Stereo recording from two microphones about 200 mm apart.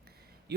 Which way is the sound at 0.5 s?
55° right (ahead or behind).